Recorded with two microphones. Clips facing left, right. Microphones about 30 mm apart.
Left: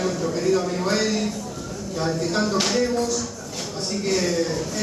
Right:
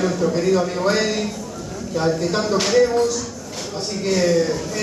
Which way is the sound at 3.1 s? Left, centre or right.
Centre.